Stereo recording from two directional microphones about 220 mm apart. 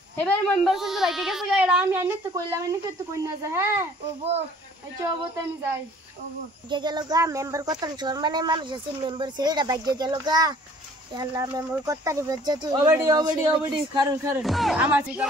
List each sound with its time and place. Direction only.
0.2 s speech: centre (ahead or behind)
4.2 s speech: 30° right (ahead or behind)
5.0 s speech: 15° right (ahead or behind)
6.7 s speech: 20° right (ahead or behind)
14.4 s speech: centre (ahead or behind)